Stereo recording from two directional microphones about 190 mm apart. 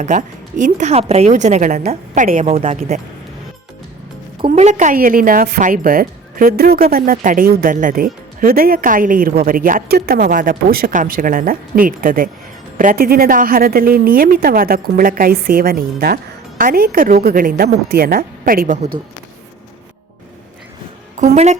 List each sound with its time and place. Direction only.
0.0 s a woman's voice: 40° right (ahead or behind)
2.5 s a woman's voice: 35° right (ahead or behind)
4.4 s speech: 30° right (ahead or behind); by 18.8 s 50° right (ahead or behind)
21.3 s a woman's voice: 35° right (ahead or behind)